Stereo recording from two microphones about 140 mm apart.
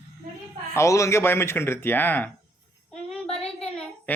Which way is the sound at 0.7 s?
20° left (ahead or behind).